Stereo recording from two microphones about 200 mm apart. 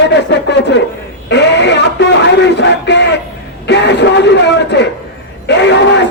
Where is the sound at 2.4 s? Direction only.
60° left (ahead or behind).